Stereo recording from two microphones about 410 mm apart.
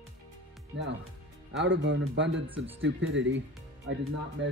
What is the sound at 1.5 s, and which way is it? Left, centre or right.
Speech, right.